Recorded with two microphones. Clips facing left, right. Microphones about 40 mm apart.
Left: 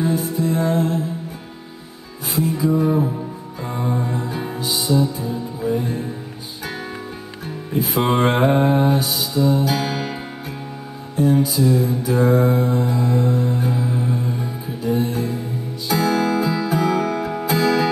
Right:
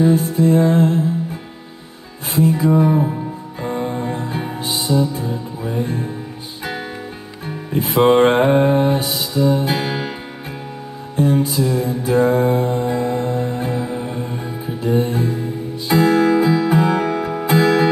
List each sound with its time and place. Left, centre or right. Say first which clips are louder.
0.1 s music: right 6 dB; right
2.3 s music: right 4 dB; right
3.6 s music: right 2 dB; right
7.4 s music: right 1 dB; right
8.4 s mantra: right 2 dB; centre; by 9.1 s right
9.1 s music: right 1 dB; right
11.4 s music: left 1 dB; right
14.8 s music: right 3 dB; right
17.5 s music: right 4 dB; right